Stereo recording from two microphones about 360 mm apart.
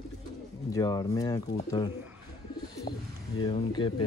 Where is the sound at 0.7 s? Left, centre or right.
Centre.